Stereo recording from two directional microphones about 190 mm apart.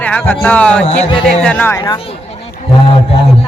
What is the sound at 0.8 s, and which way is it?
Speech, 35° left (ahead or behind).